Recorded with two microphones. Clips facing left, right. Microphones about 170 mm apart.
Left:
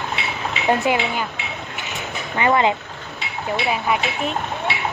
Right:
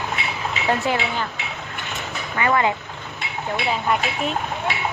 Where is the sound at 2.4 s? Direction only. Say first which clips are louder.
Left 2 dB; 20° left (ahead or behind).